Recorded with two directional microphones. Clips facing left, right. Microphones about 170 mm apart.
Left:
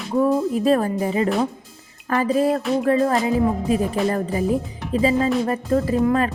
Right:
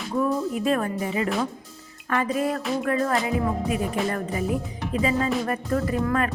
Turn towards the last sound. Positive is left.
turn(degrees=25)  # may be behind; listen again after turning